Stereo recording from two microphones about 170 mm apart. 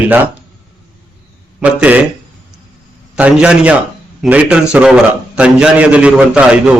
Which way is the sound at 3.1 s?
5° right (ahead or behind).